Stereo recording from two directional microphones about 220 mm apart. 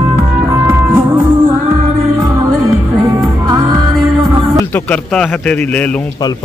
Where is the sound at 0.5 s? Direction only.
10° right (ahead or behind).